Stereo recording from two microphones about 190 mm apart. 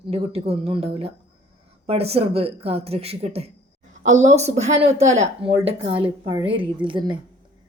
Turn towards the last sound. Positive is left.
turn(degrees=-25)  # may be behind; listen again after turning